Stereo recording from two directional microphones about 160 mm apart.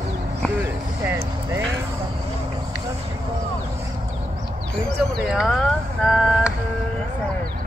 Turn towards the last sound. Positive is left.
turn(degrees=0)  # may be behind; listen again after turning